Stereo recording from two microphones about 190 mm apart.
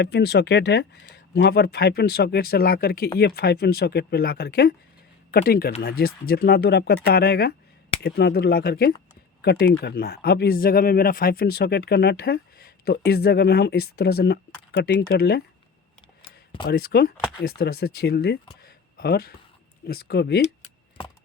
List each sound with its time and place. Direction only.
0.0 s speech: 60° left (ahead or behind)
16.2 s a sound: 25° left (ahead or behind)
16.6 s speech: 55° left (ahead or behind)